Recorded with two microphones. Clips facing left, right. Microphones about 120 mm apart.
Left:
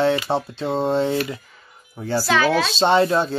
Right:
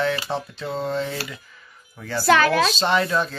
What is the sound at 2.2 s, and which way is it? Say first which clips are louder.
Speech: right 2 dB; 55° right (ahead or behind).